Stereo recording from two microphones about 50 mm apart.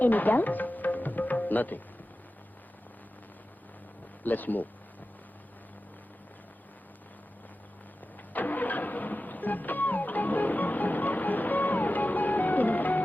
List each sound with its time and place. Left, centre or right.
0.0 s music: left
4.2 s speech: left
8.3 s vehicle: left